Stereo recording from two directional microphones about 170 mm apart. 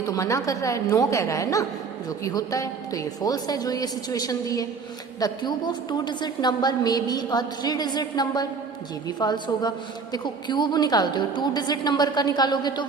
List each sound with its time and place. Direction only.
0.0 s a woman's voice: 20° left (ahead or behind)